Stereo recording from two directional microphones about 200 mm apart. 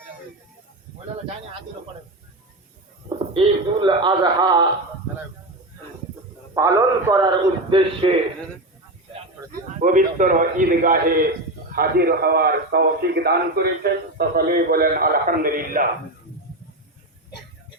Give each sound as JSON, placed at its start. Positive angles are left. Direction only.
{"t": 3.3, "sound": "a man's voice", "side_deg": -25}
{"t": 6.5, "sound": "a man's voice", "side_deg": -15}
{"t": 9.5, "sound": "a man's voice", "side_deg": -40}